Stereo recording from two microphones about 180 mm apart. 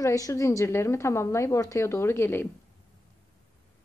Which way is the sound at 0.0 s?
15° left (ahead or behind).